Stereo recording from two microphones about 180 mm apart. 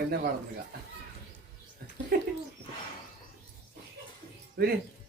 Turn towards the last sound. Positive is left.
turn(degrees=-65)  # may be behind; listen again after turning